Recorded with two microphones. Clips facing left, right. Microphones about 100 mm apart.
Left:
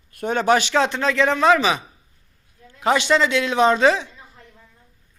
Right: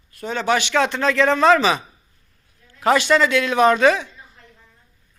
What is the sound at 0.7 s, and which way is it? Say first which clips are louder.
A man's voice: right 1 dB; 20° left (ahead or behind).